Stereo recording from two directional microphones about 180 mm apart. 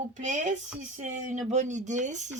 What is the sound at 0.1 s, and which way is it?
Speech, 45° right (ahead or behind).